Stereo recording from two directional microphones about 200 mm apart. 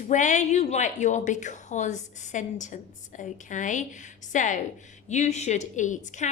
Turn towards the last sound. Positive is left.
turn(degrees=35)  # may be behind; listen again after turning